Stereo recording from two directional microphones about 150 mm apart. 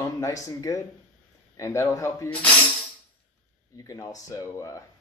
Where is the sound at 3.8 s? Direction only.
25° left (ahead or behind).